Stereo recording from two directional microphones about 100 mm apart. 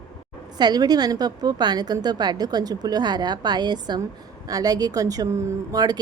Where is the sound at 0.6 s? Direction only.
40° right (ahead or behind).